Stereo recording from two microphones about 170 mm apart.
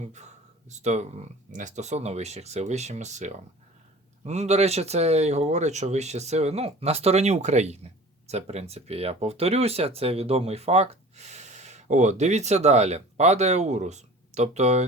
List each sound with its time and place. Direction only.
0.0 s speech: 45° right (ahead or behind)